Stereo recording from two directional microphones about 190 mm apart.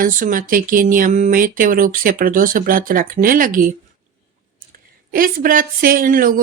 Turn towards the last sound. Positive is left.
turn(degrees=-45)  # may be behind; listen again after turning